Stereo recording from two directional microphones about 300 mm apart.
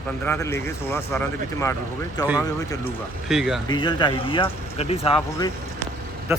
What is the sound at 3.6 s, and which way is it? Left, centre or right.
Speech, centre.